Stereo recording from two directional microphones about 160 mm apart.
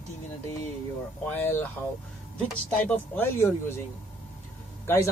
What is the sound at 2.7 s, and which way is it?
Speech, 10° left (ahead or behind).